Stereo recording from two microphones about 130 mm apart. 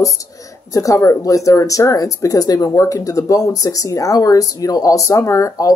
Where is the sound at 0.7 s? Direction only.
25° left (ahead or behind).